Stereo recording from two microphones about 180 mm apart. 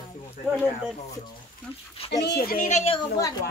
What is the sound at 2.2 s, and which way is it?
Speech, 55° left (ahead or behind).